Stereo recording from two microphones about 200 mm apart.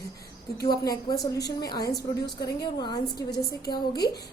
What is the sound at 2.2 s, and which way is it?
Speech, 20° left (ahead or behind).